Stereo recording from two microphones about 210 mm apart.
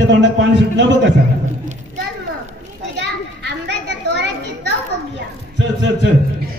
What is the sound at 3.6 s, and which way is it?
Children playing, 55° right (ahead or behind).